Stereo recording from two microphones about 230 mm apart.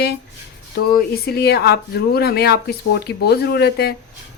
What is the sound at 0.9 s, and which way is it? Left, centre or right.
A woman's voice, left.